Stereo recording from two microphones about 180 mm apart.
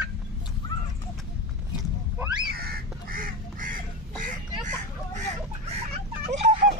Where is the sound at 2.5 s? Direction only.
55° right (ahead or behind).